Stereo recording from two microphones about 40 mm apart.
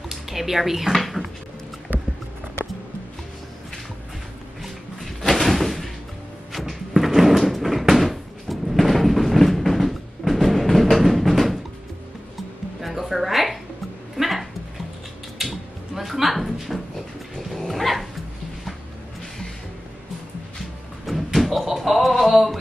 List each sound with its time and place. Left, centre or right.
0.1 s speech: centre
1.9 s music: right
5.2 s door: centre
6.5 s drawer open or close: centre
12.8 s music: centre
14.1 s dog: centre
15.3 s a sound: centre
17.4 s dog: centre
21.0 s music: centre